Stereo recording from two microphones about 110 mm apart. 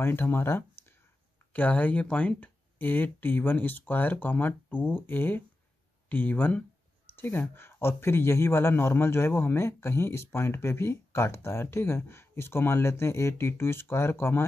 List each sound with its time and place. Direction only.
0.0 s a man's voice: 20° left (ahead or behind)